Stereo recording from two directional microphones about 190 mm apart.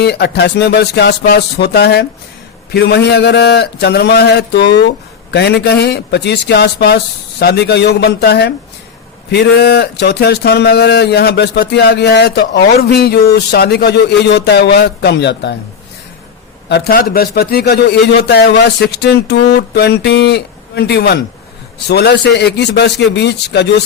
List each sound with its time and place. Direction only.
0.0 s speech: 60° left (ahead or behind)
16.6 s speech: 60° left (ahead or behind)